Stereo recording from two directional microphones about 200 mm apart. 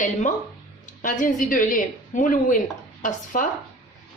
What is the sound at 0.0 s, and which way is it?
A woman's voice, 35° left (ahead or behind).